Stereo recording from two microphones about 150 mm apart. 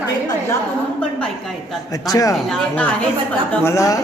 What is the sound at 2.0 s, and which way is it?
Speech, 25° left (ahead or behind).